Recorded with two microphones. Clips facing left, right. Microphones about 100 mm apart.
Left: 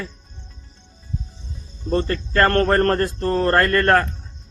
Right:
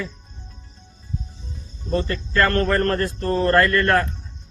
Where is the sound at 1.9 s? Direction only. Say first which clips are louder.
Left 2 dB; 45° left (ahead or behind).